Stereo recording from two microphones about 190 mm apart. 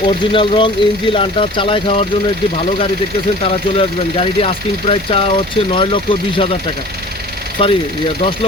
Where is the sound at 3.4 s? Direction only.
30° left (ahead or behind).